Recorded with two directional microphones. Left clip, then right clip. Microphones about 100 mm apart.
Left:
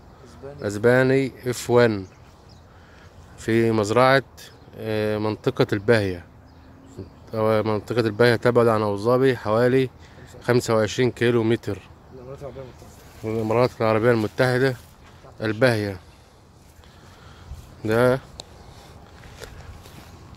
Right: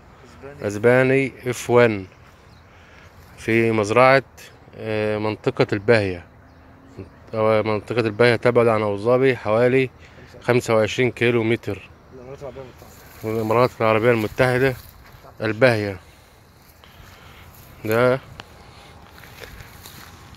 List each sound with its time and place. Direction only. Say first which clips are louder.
0.6 s speech: right 2 dB; 5° right (ahead or behind)
3.3 s speech: right 2 dB; 5° right (ahead or behind)
7.2 s speech: right 2 dB; 10° left (ahead or behind)
13.2 s speech: right 2 dB; 5° right (ahead or behind)
17.8 s speech: right 1 dB; 20° left (ahead or behind)